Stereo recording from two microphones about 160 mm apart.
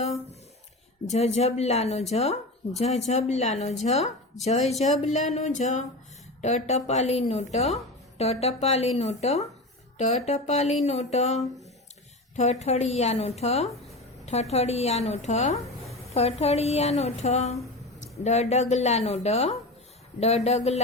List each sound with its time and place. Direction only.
1.0 s a woman's voice: 45° left (ahead or behind)